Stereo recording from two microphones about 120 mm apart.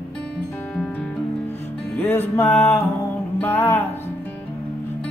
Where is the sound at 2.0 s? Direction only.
15° left (ahead or behind).